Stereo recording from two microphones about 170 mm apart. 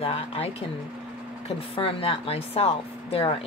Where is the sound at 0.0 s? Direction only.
35° left (ahead or behind).